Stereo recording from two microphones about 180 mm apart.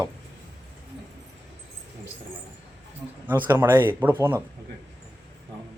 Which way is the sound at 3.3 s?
10° right (ahead or behind).